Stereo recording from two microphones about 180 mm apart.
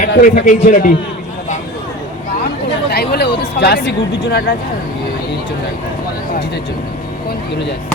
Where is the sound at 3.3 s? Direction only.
65° left (ahead or behind).